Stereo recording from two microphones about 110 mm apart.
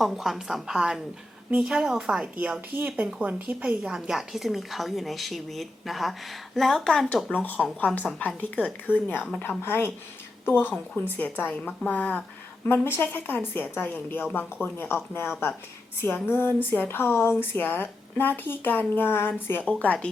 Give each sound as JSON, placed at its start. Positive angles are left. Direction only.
{"t": 0.0, "sound": "a woman's voice", "side_deg": 0}
{"t": 7.4, "sound": "a woman's voice", "side_deg": 15}